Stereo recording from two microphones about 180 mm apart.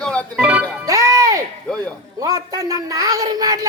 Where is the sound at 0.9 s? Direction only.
20° right (ahead or behind).